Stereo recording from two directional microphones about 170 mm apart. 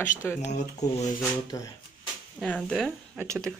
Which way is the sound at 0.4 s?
45° left (ahead or behind).